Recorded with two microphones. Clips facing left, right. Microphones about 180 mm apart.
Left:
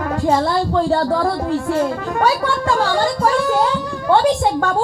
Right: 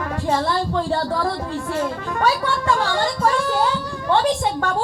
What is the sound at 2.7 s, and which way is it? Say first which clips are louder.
Speech: left 3 dB; 35° left (ahead or behind).